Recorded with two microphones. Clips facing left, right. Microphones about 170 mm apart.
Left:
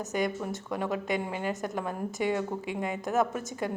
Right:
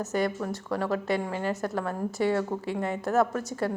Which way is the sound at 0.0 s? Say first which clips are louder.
Right 2 dB; 15° left (ahead or behind).